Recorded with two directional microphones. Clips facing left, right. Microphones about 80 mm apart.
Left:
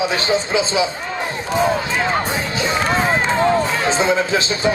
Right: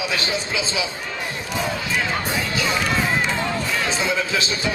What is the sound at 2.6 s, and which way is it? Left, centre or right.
Run, left.